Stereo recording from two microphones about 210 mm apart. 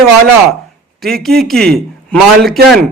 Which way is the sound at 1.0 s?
Centre (ahead or behind).